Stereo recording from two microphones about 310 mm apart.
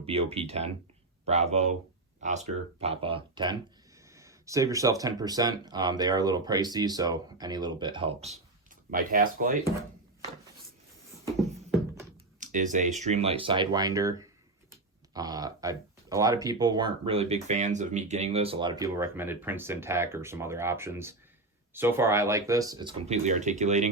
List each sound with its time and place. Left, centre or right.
0.0 s speech: centre
12.4 s speech: right